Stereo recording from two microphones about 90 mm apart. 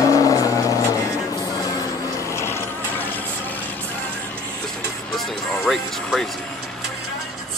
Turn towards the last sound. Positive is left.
turn(degrees=0)  # may be behind; listen again after turning